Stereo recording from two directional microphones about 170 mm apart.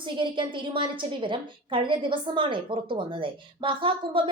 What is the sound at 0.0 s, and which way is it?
A woman's voice, 30° right (ahead or behind).